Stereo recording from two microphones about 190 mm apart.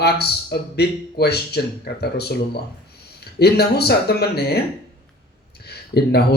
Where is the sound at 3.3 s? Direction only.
60° left (ahead or behind).